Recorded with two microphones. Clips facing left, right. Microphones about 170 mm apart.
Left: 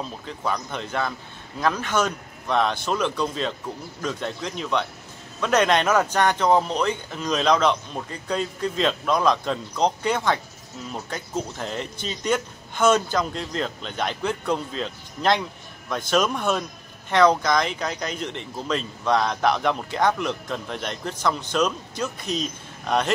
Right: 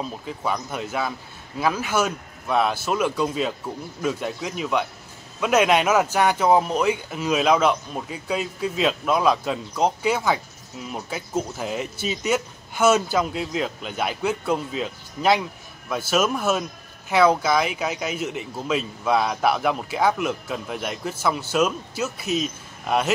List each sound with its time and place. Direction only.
0.0 s speech: 5° right (ahead or behind)